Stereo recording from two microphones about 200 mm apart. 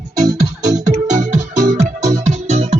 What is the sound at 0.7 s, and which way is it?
Music, 35° right (ahead or behind).